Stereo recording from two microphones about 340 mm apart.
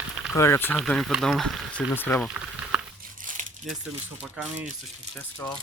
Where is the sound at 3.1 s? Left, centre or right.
Right.